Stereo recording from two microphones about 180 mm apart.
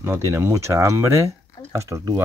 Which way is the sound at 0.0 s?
15° right (ahead or behind).